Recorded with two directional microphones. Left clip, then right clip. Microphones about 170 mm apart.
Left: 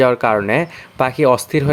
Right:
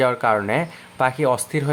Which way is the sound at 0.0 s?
30° left (ahead or behind).